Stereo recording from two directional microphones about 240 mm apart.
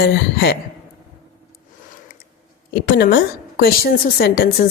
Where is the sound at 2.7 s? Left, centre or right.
Left.